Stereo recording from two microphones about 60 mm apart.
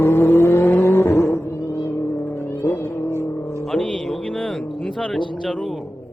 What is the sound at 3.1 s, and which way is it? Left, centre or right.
Vehicle, right.